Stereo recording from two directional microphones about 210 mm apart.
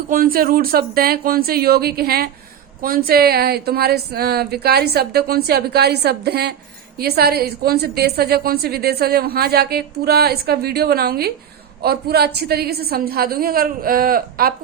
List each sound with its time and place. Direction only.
0.1 s a woman's voice: 45° right (ahead or behind)